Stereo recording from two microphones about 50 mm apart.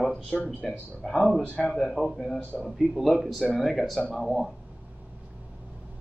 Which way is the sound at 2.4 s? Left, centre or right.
Left.